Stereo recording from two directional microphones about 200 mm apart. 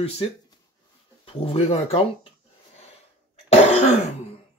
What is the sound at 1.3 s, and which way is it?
Speech, 30° left (ahead or behind).